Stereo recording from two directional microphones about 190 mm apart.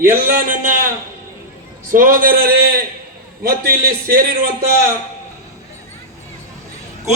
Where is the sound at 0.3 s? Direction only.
45° right (ahead or behind).